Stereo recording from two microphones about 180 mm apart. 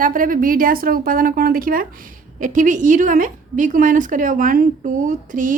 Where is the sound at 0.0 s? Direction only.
50° right (ahead or behind).